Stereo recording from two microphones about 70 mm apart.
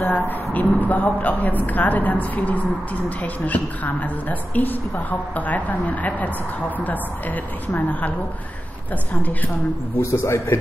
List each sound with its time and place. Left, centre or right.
0.0 s a woman's voice: left
9.1 s a woman's voice: left
9.9 s a man's voice: left